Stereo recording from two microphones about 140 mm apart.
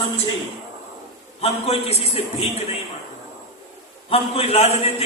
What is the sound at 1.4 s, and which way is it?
Speech, 45° left (ahead or behind).